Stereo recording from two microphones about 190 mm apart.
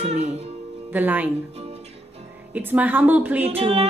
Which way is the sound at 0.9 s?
10° right (ahead or behind).